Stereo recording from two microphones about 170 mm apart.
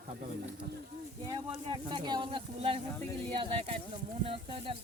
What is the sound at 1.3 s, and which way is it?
Speech, 25° right (ahead or behind).